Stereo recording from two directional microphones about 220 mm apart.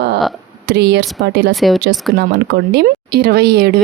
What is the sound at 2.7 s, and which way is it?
Speech, 45° right (ahead or behind).